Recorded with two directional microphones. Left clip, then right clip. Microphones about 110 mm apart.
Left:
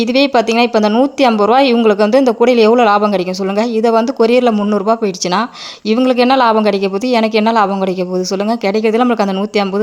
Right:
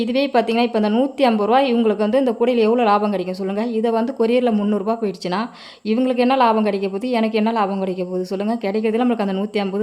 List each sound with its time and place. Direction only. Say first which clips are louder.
0.0 s speech: left 6 dB; 25° left (ahead or behind)